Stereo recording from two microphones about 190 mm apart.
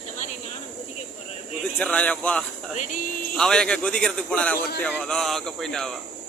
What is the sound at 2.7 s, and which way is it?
Speech, 40° left (ahead or behind).